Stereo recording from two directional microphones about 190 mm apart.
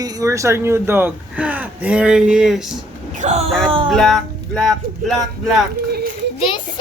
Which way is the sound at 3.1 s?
35° right (ahead or behind).